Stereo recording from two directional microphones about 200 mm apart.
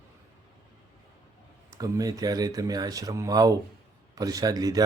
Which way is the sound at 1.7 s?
15° right (ahead or behind).